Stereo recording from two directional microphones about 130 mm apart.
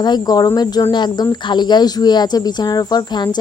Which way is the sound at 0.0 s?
30° left (ahead or behind).